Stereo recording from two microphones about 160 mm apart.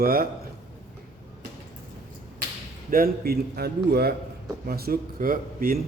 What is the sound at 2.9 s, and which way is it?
Speech, 65° right (ahead or behind).